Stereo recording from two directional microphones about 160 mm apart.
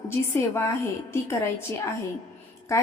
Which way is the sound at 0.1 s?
15° left (ahead or behind).